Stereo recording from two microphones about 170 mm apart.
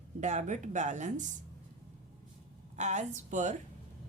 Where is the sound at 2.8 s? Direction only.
45° right (ahead or behind).